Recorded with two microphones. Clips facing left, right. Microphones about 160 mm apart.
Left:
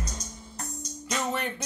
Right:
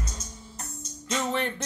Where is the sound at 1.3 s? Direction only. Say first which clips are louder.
Right 2 dB; 5° left (ahead or behind).